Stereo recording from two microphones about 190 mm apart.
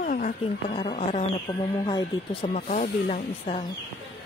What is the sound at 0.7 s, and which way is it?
Speech, 30° left (ahead or behind).